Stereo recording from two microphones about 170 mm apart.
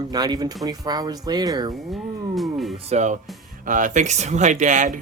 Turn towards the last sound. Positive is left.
turn(degrees=-45)  # may be behind; listen again after turning